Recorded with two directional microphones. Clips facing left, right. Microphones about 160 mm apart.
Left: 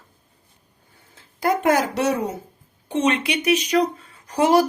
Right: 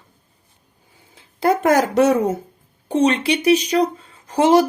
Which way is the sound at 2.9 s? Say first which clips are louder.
Right 4 dB; 35° right (ahead or behind).